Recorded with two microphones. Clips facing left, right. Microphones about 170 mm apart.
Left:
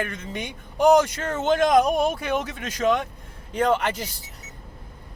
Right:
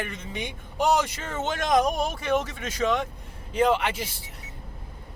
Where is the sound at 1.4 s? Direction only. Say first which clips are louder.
Left 5 dB; 50° left (ahead or behind).